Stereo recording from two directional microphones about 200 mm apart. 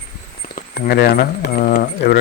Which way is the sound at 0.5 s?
50° left (ahead or behind).